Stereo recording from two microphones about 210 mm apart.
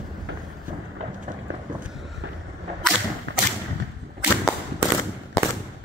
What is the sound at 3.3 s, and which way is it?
Thump, 60° right (ahead or behind).